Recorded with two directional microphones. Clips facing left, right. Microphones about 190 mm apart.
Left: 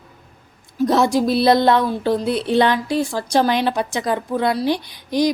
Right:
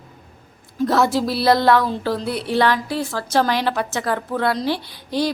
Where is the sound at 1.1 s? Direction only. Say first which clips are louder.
Left 3 dB; 20° left (ahead or behind).